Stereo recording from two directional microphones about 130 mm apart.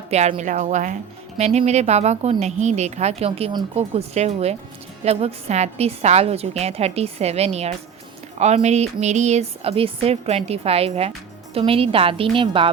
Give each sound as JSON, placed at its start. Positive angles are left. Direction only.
{"t": 0.1, "sound": "a woman's voice", "side_deg": -65}
{"t": 1.4, "sound": "a woman's voice", "side_deg": -55}